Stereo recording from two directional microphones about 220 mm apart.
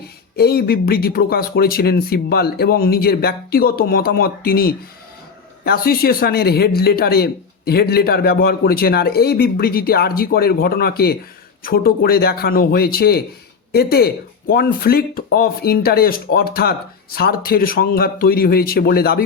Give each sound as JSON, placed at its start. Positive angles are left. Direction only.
{"t": 0.0, "sound": "speech", "side_deg": 45}